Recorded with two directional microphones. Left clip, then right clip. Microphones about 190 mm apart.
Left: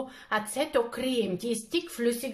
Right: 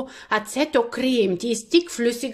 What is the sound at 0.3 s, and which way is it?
A woman's voice, 40° right (ahead or behind).